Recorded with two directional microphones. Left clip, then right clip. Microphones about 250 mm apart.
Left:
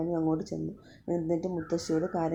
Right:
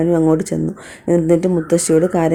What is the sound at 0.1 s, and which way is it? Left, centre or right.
Speech, right.